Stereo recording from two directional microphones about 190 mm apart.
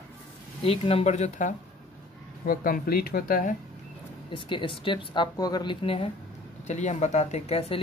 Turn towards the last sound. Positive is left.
turn(degrees=35)  # may be behind; listen again after turning